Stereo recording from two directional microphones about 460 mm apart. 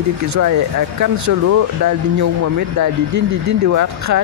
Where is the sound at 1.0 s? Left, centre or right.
Right.